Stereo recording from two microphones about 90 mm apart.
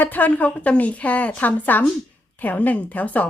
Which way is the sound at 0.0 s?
20° left (ahead or behind).